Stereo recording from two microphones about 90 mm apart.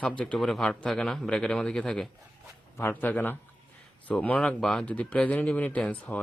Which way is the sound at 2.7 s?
25° left (ahead or behind).